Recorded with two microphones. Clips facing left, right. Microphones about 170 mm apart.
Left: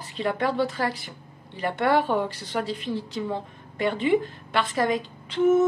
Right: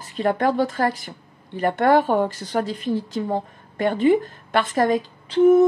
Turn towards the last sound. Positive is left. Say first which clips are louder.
# right 6 dB
turn(degrees=-35)  # may be behind; listen again after turning